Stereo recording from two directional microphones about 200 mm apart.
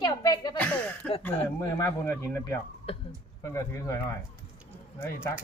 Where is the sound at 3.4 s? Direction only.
15° left (ahead or behind).